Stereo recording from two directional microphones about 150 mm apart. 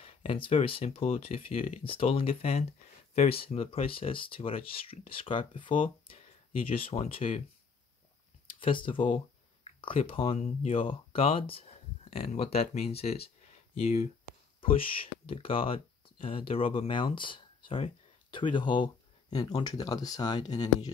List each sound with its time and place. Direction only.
0.0 s speech: 40° left (ahead or behind)
8.5 s speech: 35° left (ahead or behind)